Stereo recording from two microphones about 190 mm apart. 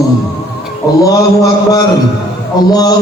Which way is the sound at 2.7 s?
20° left (ahead or behind).